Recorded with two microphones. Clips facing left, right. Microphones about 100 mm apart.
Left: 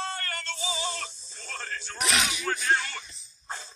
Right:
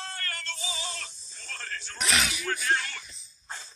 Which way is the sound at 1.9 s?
Centre (ahead or behind).